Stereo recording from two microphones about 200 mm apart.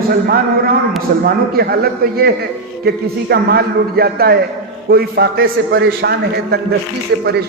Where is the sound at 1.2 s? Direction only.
50° right (ahead or behind).